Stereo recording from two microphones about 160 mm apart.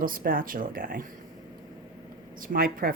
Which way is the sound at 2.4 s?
65° right (ahead or behind).